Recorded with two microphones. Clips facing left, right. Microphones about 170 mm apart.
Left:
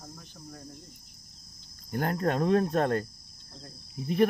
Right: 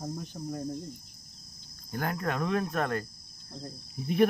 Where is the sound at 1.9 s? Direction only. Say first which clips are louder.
Left 4 dB; 25° left (ahead or behind).